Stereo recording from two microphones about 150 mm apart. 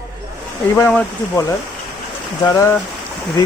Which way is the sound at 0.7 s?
10° left (ahead or behind).